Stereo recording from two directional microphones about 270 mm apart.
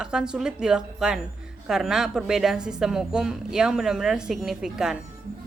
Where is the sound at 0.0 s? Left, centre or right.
Centre.